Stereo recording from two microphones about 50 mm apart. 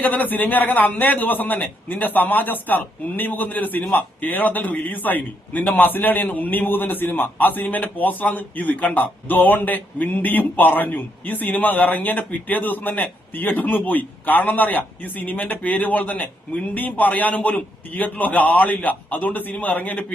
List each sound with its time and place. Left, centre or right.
0.0 s a man's voice: left